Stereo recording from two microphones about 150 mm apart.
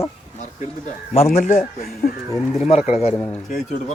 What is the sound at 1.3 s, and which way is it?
Speech, 60° left (ahead or behind).